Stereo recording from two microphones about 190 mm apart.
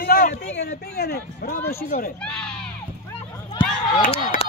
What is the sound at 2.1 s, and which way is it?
Speech, 5° left (ahead or behind).